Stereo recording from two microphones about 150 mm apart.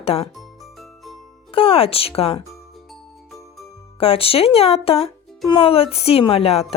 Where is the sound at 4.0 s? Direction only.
40° left (ahead or behind).